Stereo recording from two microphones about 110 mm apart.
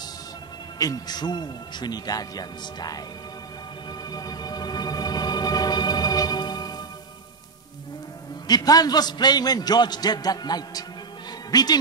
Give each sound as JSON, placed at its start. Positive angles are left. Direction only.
{"t": 0.7, "sound": "a man's voice", "side_deg": 35}
{"t": 4.1, "sound": "music", "side_deg": 35}
{"t": 8.5, "sound": "a man's voice", "side_deg": 35}